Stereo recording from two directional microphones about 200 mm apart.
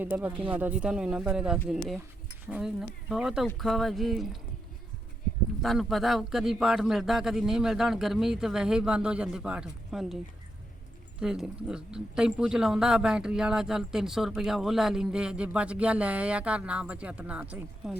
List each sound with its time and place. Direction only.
0.0 s speech: 10° right (ahead or behind)
5.6 s speech: centre (ahead or behind)
11.2 s speech: 5° right (ahead or behind)